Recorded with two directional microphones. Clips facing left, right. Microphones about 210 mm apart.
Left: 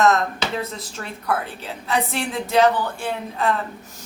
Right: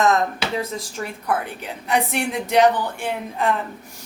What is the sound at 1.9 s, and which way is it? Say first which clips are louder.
A woman's voice: right 2 dB; 15° right (ahead or behind).